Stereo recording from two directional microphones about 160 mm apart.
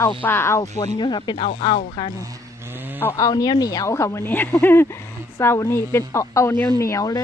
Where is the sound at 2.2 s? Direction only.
15° right (ahead or behind).